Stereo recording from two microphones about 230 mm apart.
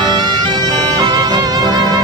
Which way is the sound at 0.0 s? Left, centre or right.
Centre.